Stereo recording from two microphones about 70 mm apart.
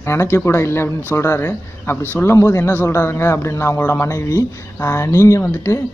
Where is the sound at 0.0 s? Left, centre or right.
Left.